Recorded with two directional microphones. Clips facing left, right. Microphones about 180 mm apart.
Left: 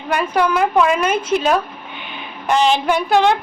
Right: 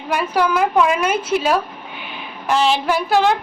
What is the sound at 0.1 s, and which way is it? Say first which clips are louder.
A woman's voice: left 1 dB; 5° right (ahead or behind).